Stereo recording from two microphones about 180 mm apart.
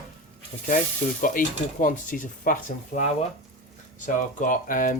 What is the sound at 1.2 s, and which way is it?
Speech, 50° left (ahead or behind).